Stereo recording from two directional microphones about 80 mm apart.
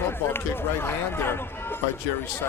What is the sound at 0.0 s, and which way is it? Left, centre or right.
Speech, left.